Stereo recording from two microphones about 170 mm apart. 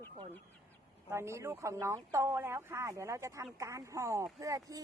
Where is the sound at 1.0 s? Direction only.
15° right (ahead or behind).